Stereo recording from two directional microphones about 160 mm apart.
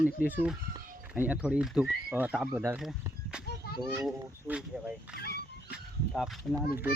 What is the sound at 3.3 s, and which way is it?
Children playing, 5° right (ahead or behind).